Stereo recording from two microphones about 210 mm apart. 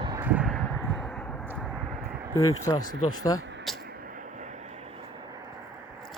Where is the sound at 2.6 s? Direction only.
20° left (ahead or behind).